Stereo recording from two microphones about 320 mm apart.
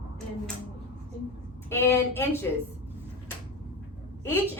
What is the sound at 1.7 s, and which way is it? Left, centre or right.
Speech, centre.